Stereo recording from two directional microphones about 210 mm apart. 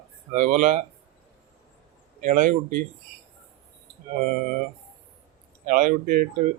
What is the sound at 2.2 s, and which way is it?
Speech, 40° right (ahead or behind).